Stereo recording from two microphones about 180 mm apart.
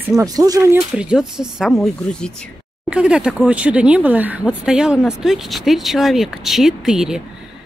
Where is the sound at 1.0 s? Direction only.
5° right (ahead or behind).